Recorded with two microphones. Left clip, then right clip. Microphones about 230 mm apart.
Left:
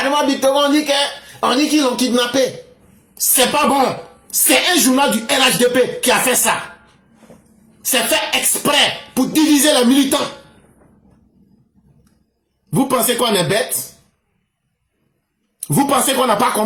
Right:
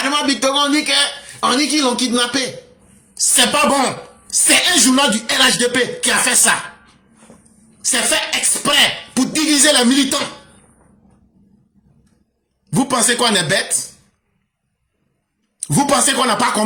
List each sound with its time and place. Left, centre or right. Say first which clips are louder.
0.1 s a man's voice: left 3 dB; right
12.7 s speech: even; right
15.6 s speech: even; right